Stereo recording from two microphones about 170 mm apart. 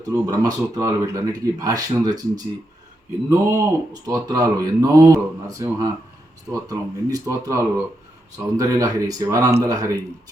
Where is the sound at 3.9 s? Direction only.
25° right (ahead or behind).